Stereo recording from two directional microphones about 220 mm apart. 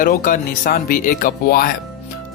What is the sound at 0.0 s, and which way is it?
Speech, 40° left (ahead or behind).